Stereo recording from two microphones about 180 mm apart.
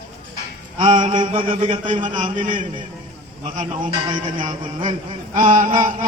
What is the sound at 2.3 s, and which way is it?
Speech, 45° right (ahead or behind).